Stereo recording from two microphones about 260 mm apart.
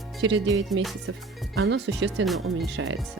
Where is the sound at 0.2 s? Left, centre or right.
Right.